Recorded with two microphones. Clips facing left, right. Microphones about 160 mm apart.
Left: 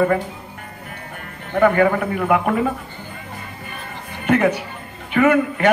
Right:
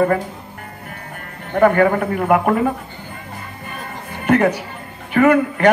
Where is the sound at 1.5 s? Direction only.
45° right (ahead or behind).